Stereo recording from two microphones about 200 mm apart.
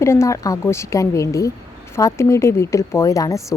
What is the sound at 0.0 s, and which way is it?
A woman's voice, 15° left (ahead or behind).